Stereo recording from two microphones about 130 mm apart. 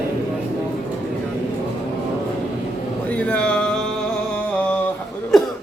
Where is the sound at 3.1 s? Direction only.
10° left (ahead or behind).